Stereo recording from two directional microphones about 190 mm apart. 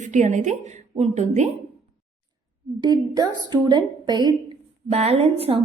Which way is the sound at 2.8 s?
20° right (ahead or behind).